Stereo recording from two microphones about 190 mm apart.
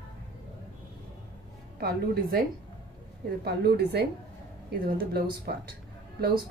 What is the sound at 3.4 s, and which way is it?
Speech, 55° right (ahead or behind).